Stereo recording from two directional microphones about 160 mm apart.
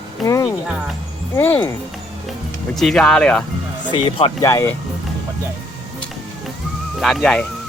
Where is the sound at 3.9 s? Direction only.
35° left (ahead or behind).